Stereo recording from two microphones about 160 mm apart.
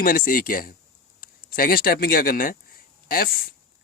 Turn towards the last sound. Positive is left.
turn(degrees=65)  # may be behind; listen again after turning